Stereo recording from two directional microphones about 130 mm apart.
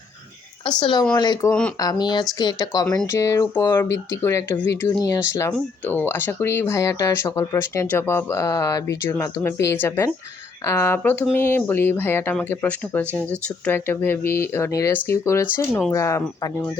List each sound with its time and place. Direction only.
0.8 s speech: 35° left (ahead or behind)